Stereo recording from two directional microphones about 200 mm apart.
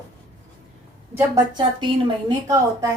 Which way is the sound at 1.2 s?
20° right (ahead or behind).